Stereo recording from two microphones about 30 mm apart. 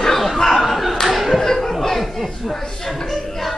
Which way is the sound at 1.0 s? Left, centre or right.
Centre.